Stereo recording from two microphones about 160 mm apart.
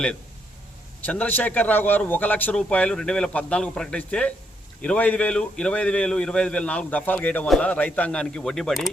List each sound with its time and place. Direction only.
1.0 s a man's voice: 10° left (ahead or behind)